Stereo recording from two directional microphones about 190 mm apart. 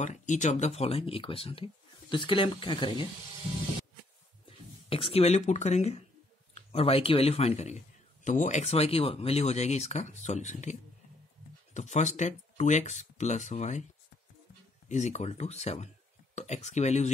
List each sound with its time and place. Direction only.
0.0 s speech: 40° left (ahead or behind)
4.5 s speech: 30° left (ahead or behind)
14.9 s speech: 35° left (ahead or behind)